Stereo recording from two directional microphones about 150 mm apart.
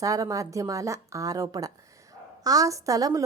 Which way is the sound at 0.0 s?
20° right (ahead or behind).